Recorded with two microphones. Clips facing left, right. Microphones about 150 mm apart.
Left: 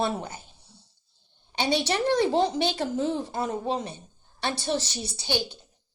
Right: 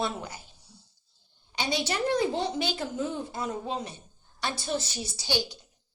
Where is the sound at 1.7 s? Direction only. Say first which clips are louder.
Left 4 dB; 65° left (ahead or behind).